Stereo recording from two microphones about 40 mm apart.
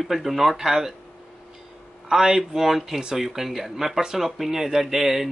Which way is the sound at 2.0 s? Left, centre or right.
Centre.